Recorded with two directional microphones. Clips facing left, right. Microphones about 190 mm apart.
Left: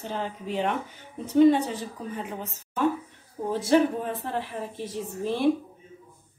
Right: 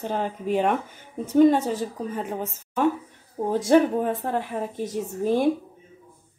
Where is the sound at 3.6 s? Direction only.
50° right (ahead or behind).